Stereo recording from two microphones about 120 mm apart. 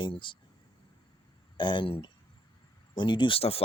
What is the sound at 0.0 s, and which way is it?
Speech, 45° left (ahead or behind).